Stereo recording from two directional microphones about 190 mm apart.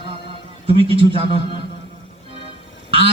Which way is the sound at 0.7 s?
30° right (ahead or behind).